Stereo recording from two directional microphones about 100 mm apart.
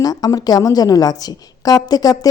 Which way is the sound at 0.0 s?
40° left (ahead or behind).